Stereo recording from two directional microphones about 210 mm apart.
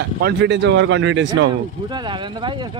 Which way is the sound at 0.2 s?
55° right (ahead or behind).